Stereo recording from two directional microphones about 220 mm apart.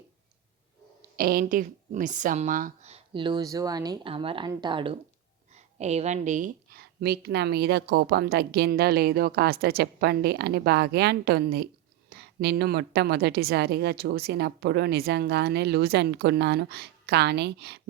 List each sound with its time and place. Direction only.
1.1 s speech: 40° right (ahead or behind)